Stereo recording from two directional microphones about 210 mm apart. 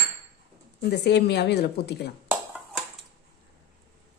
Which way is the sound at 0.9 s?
55° left (ahead or behind).